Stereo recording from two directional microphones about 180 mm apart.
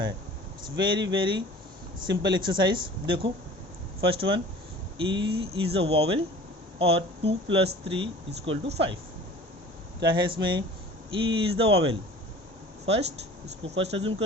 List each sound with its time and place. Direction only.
0.8 s speech: 25° right (ahead or behind)
10.0 s speech: 25° right (ahead or behind)